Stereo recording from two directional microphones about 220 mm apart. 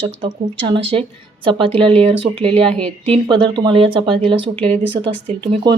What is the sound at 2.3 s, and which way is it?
Speech, 30° right (ahead or behind).